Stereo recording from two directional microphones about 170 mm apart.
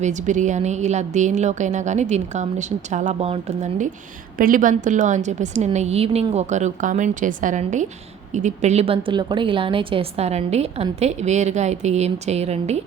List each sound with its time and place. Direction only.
0.0 s a woman's voice: 45° right (ahead or behind)
4.4 s a woman's voice: 55° right (ahead or behind)